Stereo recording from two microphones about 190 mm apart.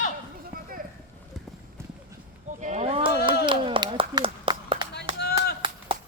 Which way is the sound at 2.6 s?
35° right (ahead or behind).